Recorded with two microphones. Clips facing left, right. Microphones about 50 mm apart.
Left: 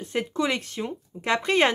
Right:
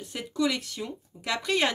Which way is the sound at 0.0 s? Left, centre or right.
Left.